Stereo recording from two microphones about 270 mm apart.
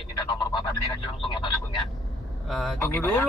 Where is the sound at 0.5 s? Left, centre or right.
Centre.